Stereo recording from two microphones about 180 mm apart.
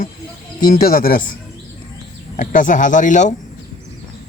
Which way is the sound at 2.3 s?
45° left (ahead or behind).